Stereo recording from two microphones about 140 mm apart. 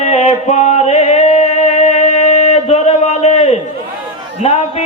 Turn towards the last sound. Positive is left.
turn(degrees=50)  # may be behind; listen again after turning